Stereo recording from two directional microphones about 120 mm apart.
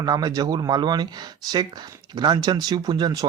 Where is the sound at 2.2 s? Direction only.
35° right (ahead or behind).